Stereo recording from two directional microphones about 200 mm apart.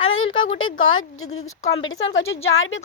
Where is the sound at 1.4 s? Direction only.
35° left (ahead or behind).